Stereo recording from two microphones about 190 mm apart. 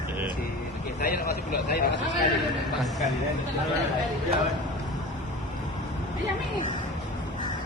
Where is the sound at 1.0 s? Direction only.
55° left (ahead or behind).